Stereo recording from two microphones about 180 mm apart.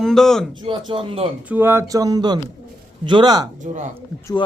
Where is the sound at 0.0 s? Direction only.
Centre (ahead or behind).